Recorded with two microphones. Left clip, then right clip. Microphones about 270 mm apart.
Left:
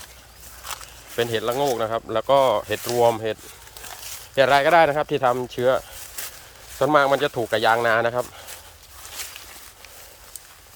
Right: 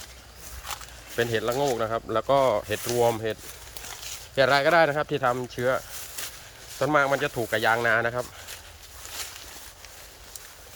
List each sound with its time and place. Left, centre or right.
0.6 s speech: centre